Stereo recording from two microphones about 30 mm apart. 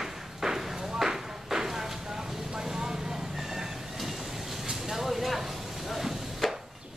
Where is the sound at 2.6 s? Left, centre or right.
Centre.